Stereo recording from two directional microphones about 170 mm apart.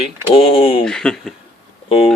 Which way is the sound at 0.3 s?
35° left (ahead or behind).